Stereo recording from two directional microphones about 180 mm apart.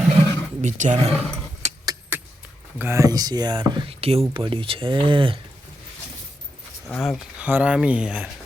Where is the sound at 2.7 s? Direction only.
15° right (ahead or behind).